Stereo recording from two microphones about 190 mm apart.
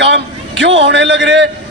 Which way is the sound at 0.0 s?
75° right (ahead or behind).